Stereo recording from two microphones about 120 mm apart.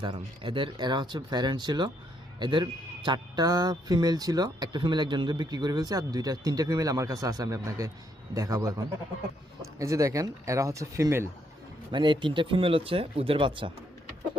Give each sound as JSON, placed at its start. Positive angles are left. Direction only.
{"t": 0.0, "sound": "speech", "side_deg": -40}
{"t": 11.9, "sound": "speech", "side_deg": -40}